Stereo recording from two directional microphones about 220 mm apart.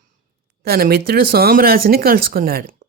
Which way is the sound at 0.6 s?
45° right (ahead or behind).